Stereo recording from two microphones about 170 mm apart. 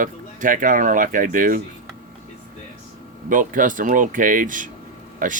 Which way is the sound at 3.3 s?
50° right (ahead or behind).